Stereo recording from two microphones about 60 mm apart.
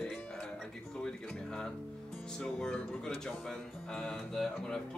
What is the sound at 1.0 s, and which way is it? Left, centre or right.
A woman's voice, centre.